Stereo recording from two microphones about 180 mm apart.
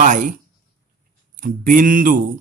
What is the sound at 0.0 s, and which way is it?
A man's voice, 45° right (ahead or behind).